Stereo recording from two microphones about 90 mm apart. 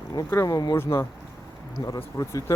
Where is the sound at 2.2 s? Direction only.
35° left (ahead or behind).